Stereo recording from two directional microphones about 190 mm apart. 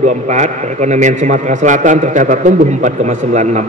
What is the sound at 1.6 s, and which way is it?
Speech, 40° right (ahead or behind).